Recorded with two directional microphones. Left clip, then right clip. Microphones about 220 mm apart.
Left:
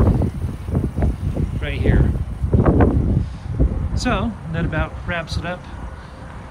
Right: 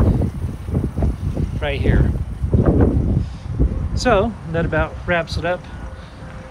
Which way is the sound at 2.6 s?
5° right (ahead or behind).